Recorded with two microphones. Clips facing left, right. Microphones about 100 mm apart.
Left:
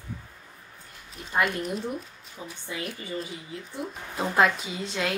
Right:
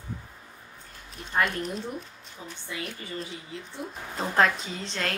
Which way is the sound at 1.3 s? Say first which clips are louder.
Left 1 dB; 5° left (ahead or behind).